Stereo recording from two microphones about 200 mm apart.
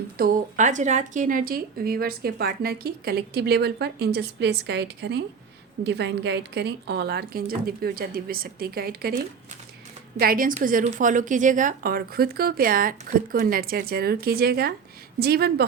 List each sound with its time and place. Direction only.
0.2 s speech: 40° right (ahead or behind)